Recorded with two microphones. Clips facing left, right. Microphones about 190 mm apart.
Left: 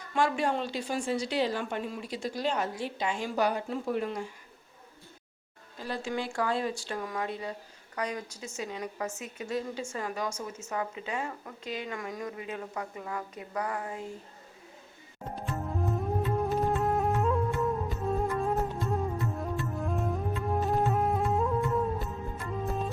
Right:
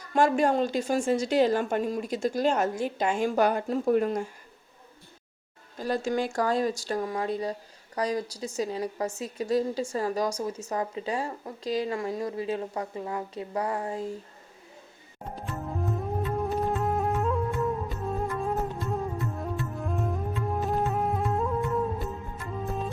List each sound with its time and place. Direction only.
0.1 s a woman's voice: 45° right (ahead or behind)
5.8 s a woman's voice: 45° right (ahead or behind)
15.5 s music: centre (ahead or behind)